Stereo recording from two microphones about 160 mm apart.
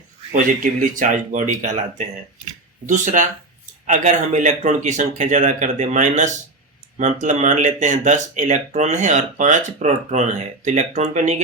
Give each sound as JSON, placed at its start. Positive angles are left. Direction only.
{"t": 0.3, "sound": "speech", "side_deg": -55}